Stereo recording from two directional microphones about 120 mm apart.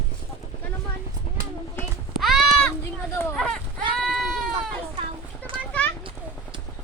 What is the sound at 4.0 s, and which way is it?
Sheep, centre (ahead or behind).